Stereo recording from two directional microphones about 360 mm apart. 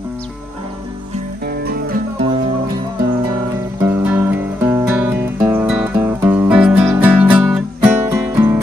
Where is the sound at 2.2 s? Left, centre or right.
Centre.